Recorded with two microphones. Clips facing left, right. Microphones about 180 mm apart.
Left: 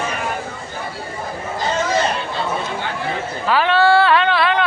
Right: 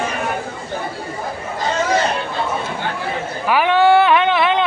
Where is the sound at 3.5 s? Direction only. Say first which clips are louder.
Right 2 dB; 15° right (ahead or behind).